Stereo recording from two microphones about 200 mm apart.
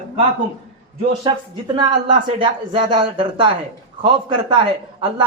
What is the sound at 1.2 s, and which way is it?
Speech, 20° right (ahead or behind).